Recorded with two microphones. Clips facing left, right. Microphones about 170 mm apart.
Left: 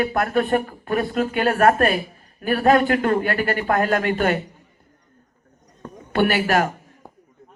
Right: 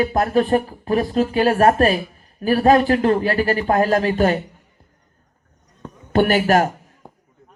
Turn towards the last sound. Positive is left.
turn(degrees=-40)  # may be behind; listen again after turning